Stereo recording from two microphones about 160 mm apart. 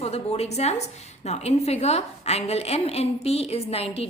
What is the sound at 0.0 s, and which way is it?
A woman's voice, 40° left (ahead or behind).